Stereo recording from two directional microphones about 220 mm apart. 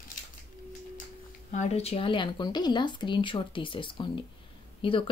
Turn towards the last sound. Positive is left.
turn(degrees=25)  # may be behind; listen again after turning